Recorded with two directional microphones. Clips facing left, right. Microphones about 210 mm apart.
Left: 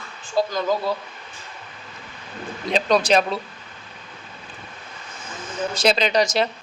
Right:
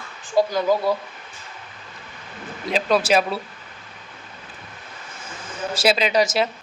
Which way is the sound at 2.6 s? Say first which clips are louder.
Left 1 dB; 5° right (ahead or behind).